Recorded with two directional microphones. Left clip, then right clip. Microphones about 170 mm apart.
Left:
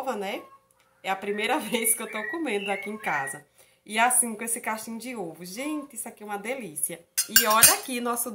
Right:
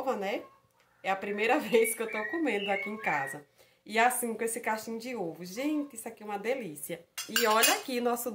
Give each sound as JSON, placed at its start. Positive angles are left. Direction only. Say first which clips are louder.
{"t": 0.0, "sound": "speech", "louder": "left 1 dB", "side_deg": -15}
{"t": 7.4, "sound": "dishes", "louder": "left 2 dB", "side_deg": -20}